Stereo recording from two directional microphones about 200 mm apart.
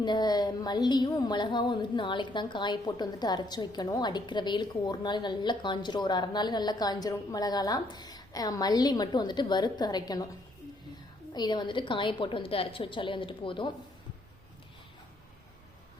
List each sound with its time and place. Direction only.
0.0 s a woman's voice: 20° left (ahead or behind)
11.3 s a woman's voice: 20° left (ahead or behind)